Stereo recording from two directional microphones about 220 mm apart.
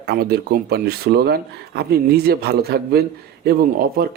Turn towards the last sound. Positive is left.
turn(degrees=-45)  # may be behind; listen again after turning